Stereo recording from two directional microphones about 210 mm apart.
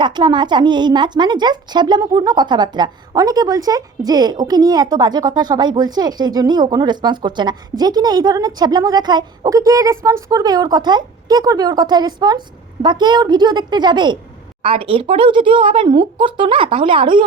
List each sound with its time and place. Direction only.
0.0 s a woman's voice: 20° right (ahead or behind)